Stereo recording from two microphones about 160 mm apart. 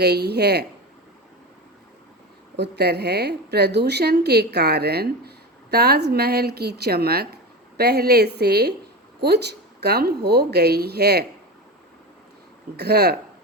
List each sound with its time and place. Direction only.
0.0 s a woman's voice: 90° right
2.6 s a woman's voice: 90° right
12.7 s a woman's voice: 90° right